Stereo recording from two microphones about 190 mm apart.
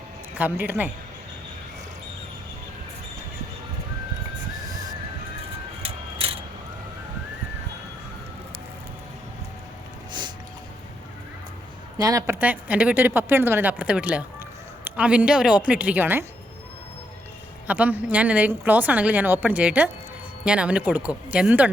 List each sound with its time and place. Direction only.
0.3 s a woman's voice: 10° right (ahead or behind)
4.6 s music: 20° right (ahead or behind)
5.8 s music: 30° right (ahead or behind)
10.1 s a sound: 25° right (ahead or behind)
11.9 s a woman's voice: 20° right (ahead or behind)
17.7 s a woman's voice: 10° right (ahead or behind)